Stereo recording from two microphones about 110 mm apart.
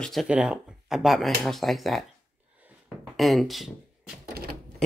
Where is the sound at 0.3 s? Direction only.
10° right (ahead or behind).